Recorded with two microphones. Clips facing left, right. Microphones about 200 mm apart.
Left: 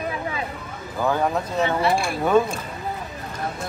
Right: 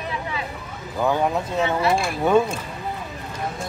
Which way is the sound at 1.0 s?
Centre (ahead or behind).